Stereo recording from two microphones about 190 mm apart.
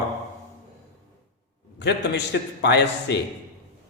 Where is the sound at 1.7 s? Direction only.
65° left (ahead or behind).